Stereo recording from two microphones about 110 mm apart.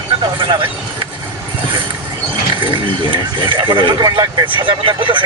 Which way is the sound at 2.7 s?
50° right (ahead or behind).